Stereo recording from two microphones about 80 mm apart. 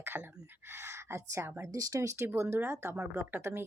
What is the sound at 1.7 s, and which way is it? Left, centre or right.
Speech, right.